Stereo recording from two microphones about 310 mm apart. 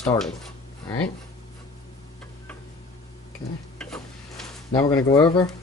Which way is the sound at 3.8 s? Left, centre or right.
Centre.